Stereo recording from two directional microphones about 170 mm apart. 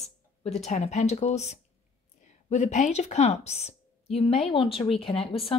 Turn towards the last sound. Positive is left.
turn(degrees=35)  # may be behind; listen again after turning